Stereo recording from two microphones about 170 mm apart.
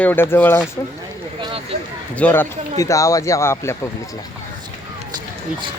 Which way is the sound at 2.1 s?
10° left (ahead or behind).